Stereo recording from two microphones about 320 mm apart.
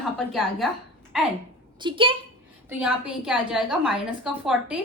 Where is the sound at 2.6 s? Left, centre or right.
Centre.